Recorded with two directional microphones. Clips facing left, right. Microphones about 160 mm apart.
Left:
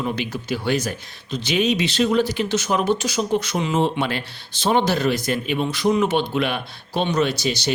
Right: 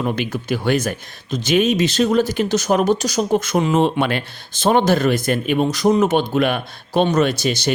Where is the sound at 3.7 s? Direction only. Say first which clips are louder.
Right 2 dB; 60° right (ahead or behind).